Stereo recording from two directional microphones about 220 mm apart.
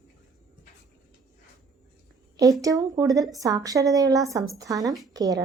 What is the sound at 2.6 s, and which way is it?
A woman's voice, 15° right (ahead or behind).